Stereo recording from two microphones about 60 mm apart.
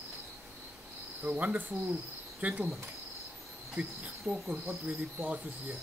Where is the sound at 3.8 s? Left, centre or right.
Right.